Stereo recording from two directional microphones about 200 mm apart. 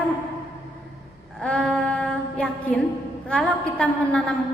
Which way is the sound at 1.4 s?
5° left (ahead or behind).